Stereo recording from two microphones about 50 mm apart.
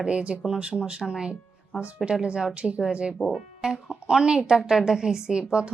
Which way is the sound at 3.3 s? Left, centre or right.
Centre.